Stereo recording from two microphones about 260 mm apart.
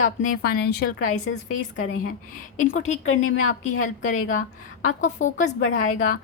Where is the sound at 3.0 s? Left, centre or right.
Left.